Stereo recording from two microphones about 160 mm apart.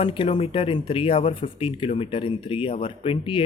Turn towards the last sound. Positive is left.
turn(degrees=35)  # may be behind; listen again after turning